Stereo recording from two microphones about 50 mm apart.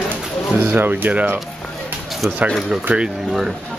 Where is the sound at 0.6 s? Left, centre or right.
Right.